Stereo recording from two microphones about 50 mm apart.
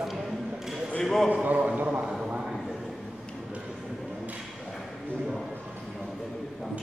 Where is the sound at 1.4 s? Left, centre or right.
Right.